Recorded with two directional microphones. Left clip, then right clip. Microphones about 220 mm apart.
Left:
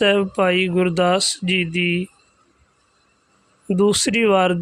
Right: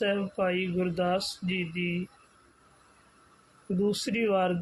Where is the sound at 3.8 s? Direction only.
45° left (ahead or behind).